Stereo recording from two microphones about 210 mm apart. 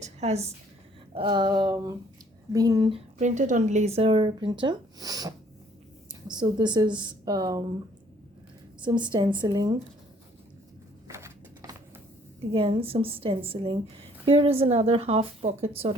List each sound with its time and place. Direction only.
0.0 s a sound: 30° right (ahead or behind)
1.1 s a woman's voice: 20° right (ahead or behind)
3.2 s a woman's voice: 35° right (ahead or behind); by 5.3 s 15° right (ahead or behind)
6.3 s a woman's voice: 20° right (ahead or behind)
8.8 s a woman's voice: 20° right (ahead or behind)
11.1 s a sound: 15° right (ahead or behind)
12.5 s a woman's voice: 25° right (ahead or behind)